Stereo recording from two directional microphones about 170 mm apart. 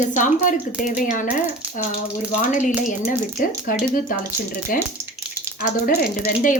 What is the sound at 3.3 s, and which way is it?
Speech, 60° left (ahead or behind).